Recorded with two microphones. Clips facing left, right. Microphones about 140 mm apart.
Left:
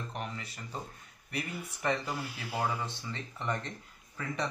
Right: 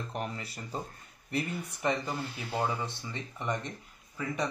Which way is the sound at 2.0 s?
10° left (ahead or behind).